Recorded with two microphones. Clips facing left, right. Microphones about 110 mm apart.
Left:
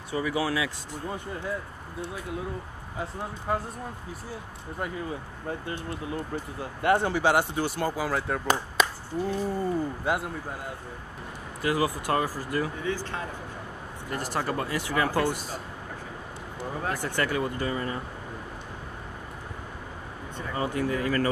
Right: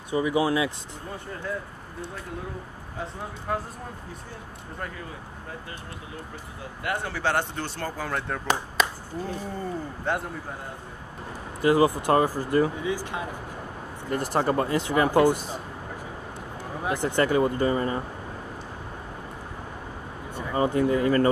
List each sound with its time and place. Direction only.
0.1 s speech: 20° right (ahead or behind)
3.0 s speech: 5° left (ahead or behind)
6.8 s speech: 30° left (ahead or behind)
7.1 s speech: 15° left (ahead or behind)
11.6 s speech: 25° right (ahead or behind)
12.8 s speech: 15° right (ahead or behind)
14.1 s speech: 25° right (ahead or behind)
16.8 s speech: 20° right (ahead or behind)
20.5 s speech: 25° right (ahead or behind)